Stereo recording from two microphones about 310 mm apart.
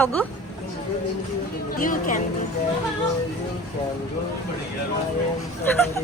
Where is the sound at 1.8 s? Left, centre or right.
Left.